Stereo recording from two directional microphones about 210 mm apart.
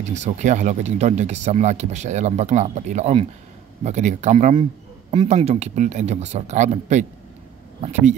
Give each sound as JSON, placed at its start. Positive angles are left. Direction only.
{"t": 0.0, "sound": "speech", "side_deg": -35}